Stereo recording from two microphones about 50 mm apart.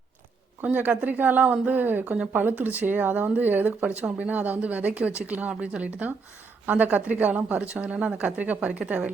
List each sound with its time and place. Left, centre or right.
0.6 s speech: right